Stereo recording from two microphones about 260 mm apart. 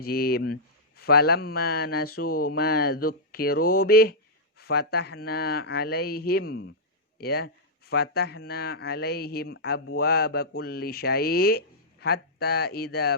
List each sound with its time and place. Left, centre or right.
0.0 s speech: left